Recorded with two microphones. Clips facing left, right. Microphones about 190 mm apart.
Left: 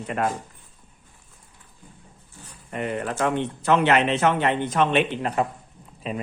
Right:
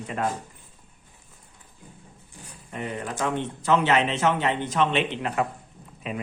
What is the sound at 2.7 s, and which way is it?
Speech, 60° left (ahead or behind).